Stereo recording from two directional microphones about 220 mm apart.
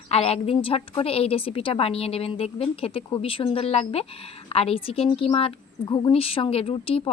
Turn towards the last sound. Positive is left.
turn(degrees=25)  # may be behind; listen again after turning